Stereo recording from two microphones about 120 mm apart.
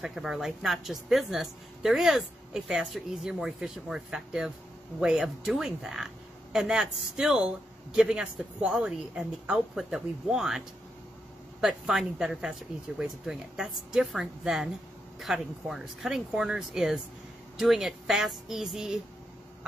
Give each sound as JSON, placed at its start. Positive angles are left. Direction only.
{"t": 0.0, "sound": "speech", "side_deg": -5}
{"t": 11.6, "sound": "speech", "side_deg": -5}